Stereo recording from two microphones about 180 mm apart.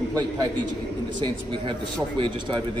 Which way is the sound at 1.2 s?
25° right (ahead or behind).